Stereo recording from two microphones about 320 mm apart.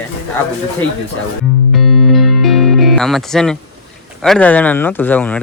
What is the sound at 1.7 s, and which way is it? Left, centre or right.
Music, centre.